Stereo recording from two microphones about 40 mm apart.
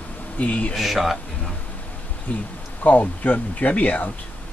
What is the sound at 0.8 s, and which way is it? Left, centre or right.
Speech, centre.